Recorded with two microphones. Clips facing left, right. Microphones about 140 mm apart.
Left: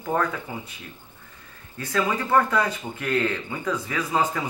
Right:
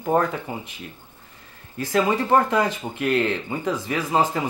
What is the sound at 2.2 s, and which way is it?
Speech, 20° right (ahead or behind).